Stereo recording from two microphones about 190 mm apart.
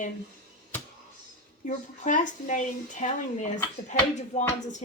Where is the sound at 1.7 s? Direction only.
40° left (ahead or behind).